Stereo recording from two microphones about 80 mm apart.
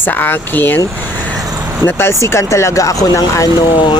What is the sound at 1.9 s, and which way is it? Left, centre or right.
Speech, left.